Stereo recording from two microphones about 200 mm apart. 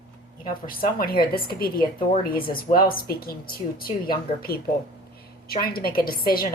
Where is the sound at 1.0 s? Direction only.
50° left (ahead or behind).